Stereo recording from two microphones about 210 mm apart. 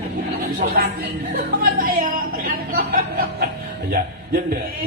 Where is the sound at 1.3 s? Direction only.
45° right (ahead or behind).